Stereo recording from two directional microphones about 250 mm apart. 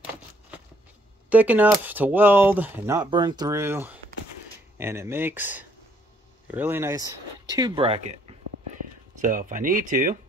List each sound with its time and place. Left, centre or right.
1.3 s speech: centre; by 10.1 s right